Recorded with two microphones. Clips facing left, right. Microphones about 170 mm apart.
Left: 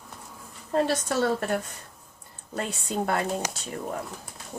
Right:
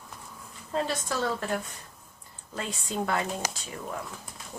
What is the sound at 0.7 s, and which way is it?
Speech, 60° left (ahead or behind).